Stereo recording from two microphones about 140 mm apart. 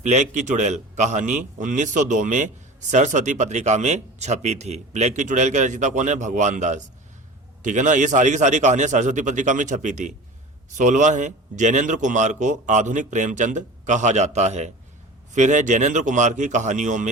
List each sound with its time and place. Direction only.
0.0 s a man's voice: 55° right (ahead or behind)